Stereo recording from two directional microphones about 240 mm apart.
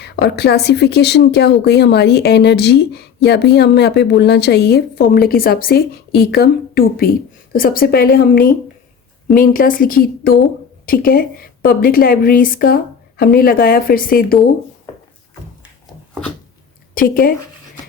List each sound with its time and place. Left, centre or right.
0.0 s a woman's voice: left
16.9 s speech: left